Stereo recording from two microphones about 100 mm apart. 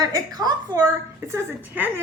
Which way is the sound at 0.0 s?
40° right (ahead or behind).